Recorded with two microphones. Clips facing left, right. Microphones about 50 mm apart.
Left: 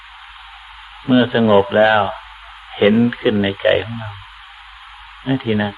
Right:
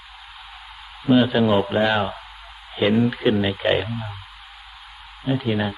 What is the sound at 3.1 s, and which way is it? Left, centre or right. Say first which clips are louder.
Speech: left 4 dB; centre.